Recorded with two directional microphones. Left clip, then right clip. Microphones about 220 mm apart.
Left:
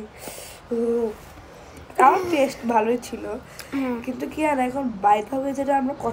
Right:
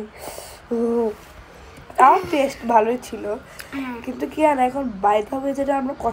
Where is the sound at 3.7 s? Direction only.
25° left (ahead or behind).